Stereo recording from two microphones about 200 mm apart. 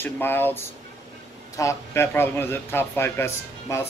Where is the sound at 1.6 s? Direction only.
15° left (ahead or behind).